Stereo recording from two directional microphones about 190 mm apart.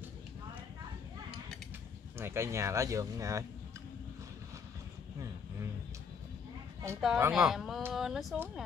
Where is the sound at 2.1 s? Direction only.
15° right (ahead or behind).